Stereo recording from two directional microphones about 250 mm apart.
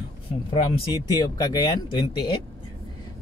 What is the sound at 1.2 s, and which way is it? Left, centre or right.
Speech, centre.